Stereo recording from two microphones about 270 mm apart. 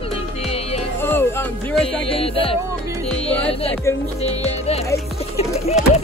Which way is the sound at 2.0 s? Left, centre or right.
Left.